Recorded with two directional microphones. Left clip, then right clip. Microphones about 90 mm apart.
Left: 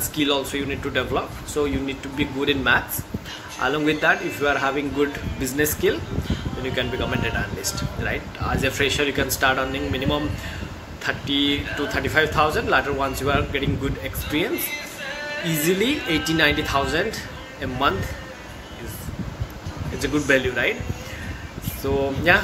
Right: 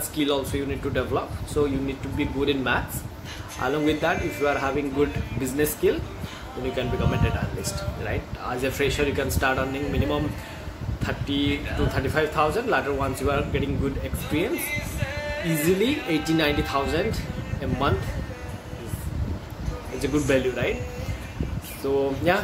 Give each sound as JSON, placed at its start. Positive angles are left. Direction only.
{"t": 0.1, "sound": "speech", "side_deg": -15}
{"t": 15.8, "sound": "speech", "side_deg": -15}
{"t": 20.0, "sound": "speech", "side_deg": -15}
{"t": 21.9, "sound": "speech", "side_deg": -15}